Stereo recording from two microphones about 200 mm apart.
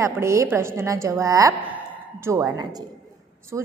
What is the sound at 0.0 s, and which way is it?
A woman's voice, 15° right (ahead or behind).